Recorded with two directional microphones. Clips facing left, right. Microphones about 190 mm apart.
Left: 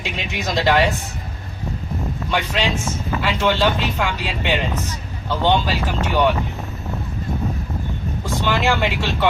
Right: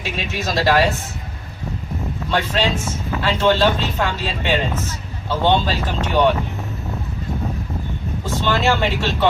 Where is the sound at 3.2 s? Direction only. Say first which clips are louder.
Right 3 dB; 15° left (ahead or behind).